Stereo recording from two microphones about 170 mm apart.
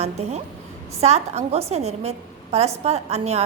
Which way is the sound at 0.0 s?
40° right (ahead or behind).